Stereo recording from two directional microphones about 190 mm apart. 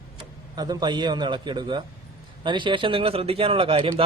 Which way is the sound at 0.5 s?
20° right (ahead or behind).